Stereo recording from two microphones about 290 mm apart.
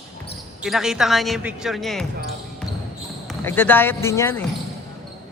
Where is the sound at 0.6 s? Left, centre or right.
Centre.